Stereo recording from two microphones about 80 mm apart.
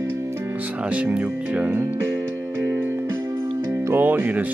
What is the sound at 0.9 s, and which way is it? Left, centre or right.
Speech, centre.